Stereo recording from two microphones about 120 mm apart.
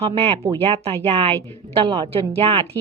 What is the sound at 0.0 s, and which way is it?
A woman's voice, 55° right (ahead or behind).